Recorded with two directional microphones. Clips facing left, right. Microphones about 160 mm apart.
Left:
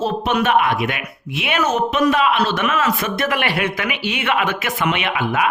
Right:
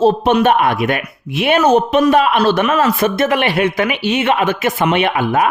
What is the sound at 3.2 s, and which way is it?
A man's voice, 25° right (ahead or behind).